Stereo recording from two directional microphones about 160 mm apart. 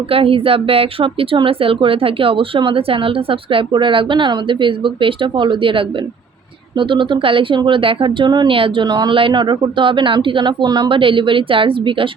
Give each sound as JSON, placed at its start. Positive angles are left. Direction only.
{"t": 0.1, "sound": "speech", "side_deg": -35}